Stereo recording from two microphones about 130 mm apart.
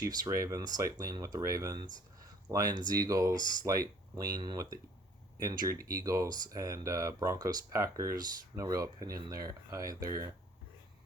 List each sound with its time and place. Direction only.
0.0 s speech: 25° right (ahead or behind)